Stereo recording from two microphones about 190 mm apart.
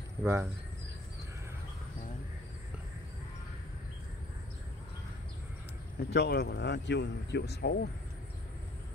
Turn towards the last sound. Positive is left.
turn(degrees=60)  # may be behind; listen again after turning